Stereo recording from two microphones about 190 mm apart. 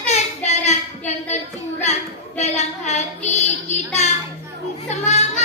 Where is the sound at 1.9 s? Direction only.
35° left (ahead or behind).